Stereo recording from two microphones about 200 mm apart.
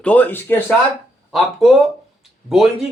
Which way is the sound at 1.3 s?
Centre (ahead or behind).